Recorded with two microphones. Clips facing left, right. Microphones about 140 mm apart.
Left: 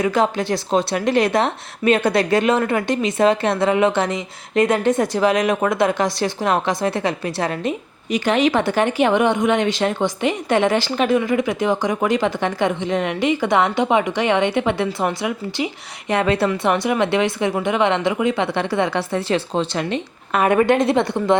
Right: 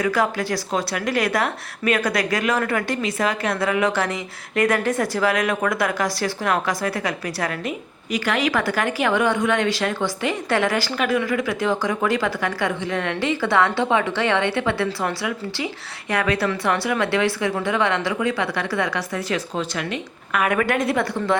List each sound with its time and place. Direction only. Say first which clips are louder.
0.0 s a woman's voice: left 3 dB; 20° left (ahead or behind)